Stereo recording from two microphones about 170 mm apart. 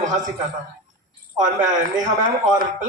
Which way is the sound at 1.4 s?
50° right (ahead or behind).